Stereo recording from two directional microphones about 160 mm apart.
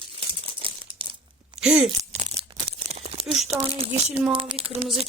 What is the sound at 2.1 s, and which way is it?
Tearing, 45° right (ahead or behind).